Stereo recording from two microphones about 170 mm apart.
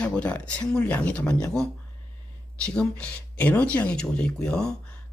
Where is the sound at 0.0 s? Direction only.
5° left (ahead or behind).